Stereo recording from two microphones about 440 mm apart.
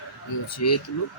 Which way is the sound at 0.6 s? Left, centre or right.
Left.